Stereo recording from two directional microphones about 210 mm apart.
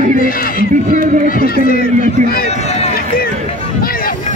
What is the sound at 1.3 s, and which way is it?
Speech, 45° left (ahead or behind).